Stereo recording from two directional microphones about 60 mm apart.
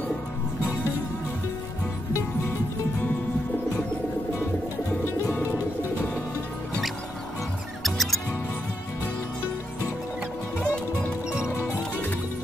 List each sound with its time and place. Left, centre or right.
5.3 s music: left
7.8 s mouse: centre